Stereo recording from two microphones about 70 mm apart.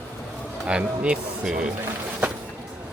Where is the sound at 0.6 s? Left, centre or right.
Centre.